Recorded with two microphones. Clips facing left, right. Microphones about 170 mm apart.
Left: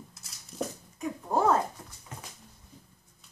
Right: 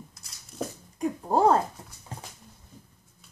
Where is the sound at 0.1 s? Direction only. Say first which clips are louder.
Left 1 dB; centre (ahead or behind).